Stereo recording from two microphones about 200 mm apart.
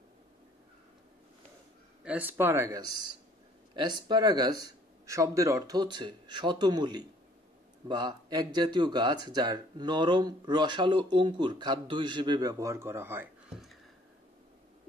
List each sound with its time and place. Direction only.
2.0 s speech: 10° right (ahead or behind)